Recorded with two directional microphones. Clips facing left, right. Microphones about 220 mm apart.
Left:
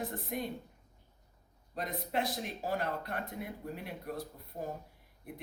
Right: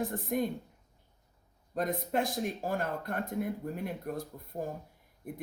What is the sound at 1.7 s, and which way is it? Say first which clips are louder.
Speech: right 5 dB; 50° right (ahead or behind).